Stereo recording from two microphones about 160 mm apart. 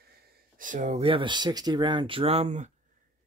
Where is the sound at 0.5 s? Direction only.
55° right (ahead or behind).